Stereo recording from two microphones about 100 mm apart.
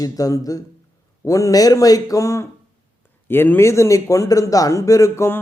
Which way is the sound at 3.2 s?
20° left (ahead or behind).